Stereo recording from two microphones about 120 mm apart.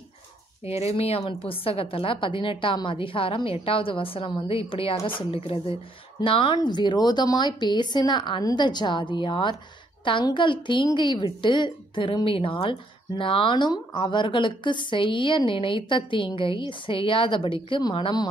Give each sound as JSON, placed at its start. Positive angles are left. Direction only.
{"t": 0.7, "sound": "a woman's voice", "side_deg": 55}